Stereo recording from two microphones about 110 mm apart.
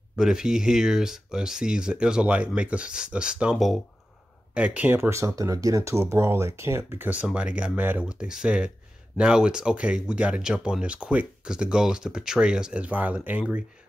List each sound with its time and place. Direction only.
0.1 s speech: 5° right (ahead or behind)
4.6 s speech: 15° right (ahead or behind)